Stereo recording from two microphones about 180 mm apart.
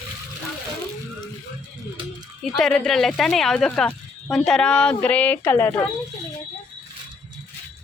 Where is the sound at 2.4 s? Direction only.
Centre (ahead or behind).